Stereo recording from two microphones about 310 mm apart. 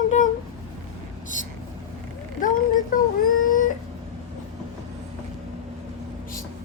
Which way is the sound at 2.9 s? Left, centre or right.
Left.